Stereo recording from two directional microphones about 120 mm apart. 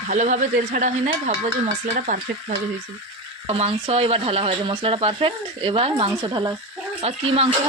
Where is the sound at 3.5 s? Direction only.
50° right (ahead or behind).